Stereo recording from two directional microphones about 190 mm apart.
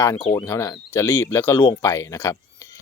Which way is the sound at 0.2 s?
25° left (ahead or behind).